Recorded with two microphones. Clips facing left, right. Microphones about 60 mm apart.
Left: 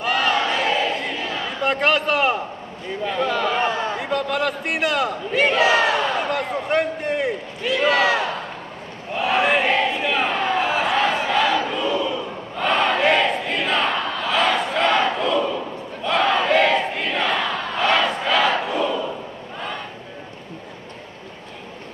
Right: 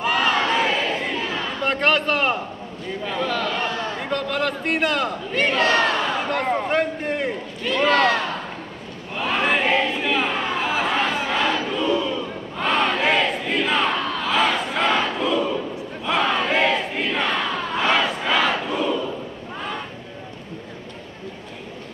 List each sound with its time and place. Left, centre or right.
0.0 s a sound: centre
3.1 s speech: centre
3.5 s a sound: left
4.0 s speech: centre
9.1 s crowd: centre
12.5 s battle cry: centre